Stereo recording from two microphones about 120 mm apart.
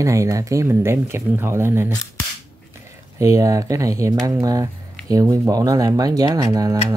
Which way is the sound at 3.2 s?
25° right (ahead or behind).